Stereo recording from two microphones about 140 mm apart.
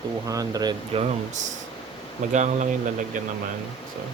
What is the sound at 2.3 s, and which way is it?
Speech, 60° right (ahead or behind).